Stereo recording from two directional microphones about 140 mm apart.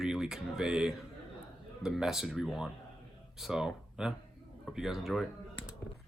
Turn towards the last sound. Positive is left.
turn(degrees=0)  # may be behind; listen again after turning